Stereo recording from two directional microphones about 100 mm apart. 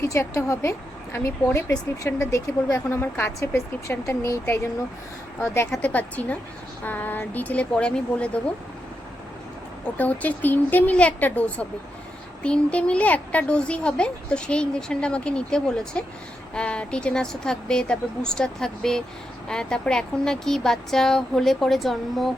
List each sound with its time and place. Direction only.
0.1 s speech: 30° left (ahead or behind)
5.7 s speech: 15° left (ahead or behind)
10.0 s speech: 15° left (ahead or behind)